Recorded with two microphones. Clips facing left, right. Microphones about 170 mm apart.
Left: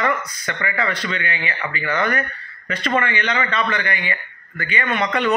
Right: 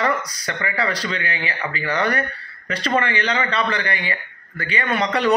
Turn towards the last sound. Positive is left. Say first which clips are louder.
# right 1 dB
turn(degrees=-35)  # may be behind; listen again after turning